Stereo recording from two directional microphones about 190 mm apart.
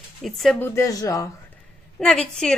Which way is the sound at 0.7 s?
20° left (ahead or behind).